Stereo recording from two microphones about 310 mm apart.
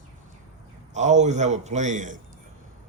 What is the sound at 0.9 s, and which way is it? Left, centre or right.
Speech, right.